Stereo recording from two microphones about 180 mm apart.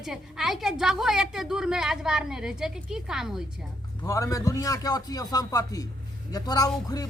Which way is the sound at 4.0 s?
20° left (ahead or behind).